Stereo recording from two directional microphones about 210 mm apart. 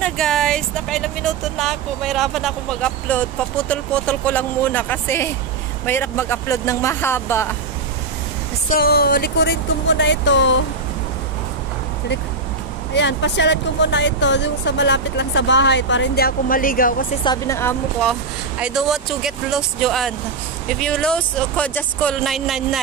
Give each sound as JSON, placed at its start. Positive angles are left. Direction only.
{"t": 0.0, "sound": "speech", "side_deg": 5}
{"t": 8.6, "sound": "speech", "side_deg": 45}
{"t": 12.9, "sound": "speech", "side_deg": 55}
{"t": 17.2, "sound": "speech", "side_deg": 15}
{"t": 18.6, "sound": "speech", "side_deg": 0}